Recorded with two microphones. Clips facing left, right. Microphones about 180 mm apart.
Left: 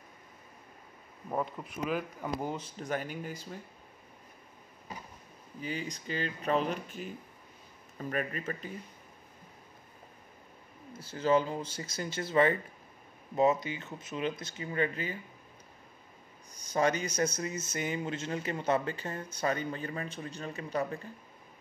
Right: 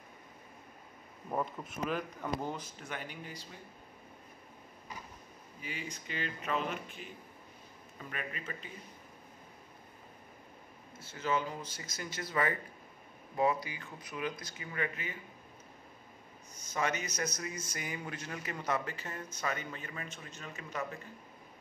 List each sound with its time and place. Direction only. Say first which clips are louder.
1.3 s a man's voice: left 2 dB; centre (ahead or behind)
2.5 s speech: left 7 dB; 35° left (ahead or behind)
5.6 s speech: left 6 dB; 35° left (ahead or behind)
11.0 s speech: left 7 dB; 30° left (ahead or behind)
16.5 s a man's voice: left 6 dB; 35° left (ahead or behind)